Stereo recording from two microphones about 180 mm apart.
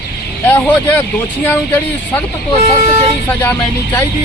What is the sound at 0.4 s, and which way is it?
Speech, 10° left (ahead or behind).